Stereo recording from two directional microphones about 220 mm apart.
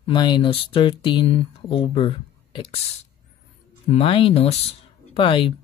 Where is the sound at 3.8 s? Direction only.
25° left (ahead or behind).